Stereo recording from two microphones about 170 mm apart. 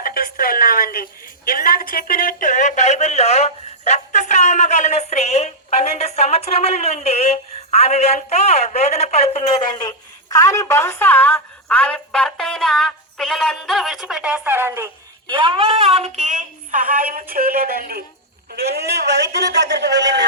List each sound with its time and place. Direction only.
0.0 s a woman's voice: 60° left (ahead or behind); by 14.8 s 15° right (ahead or behind)
15.3 s a woman's voice: 25° right (ahead or behind); by 20.2 s 90° right